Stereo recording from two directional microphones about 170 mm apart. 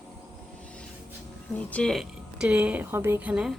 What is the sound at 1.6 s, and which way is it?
Speech, 10° left (ahead or behind).